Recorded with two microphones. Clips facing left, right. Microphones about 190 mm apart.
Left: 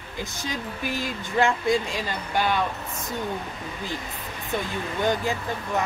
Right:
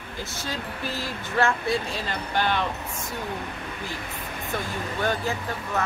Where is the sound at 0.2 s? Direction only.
15° left (ahead or behind).